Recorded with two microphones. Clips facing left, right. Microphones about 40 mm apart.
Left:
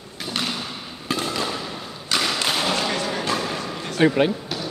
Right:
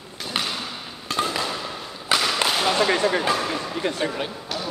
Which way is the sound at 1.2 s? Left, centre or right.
Centre.